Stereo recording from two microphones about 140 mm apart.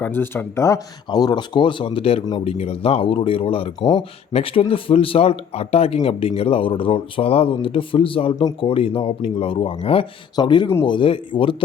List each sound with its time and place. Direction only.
0.0 s speech: 15° left (ahead or behind); by 11.5 s 35° left (ahead or behind)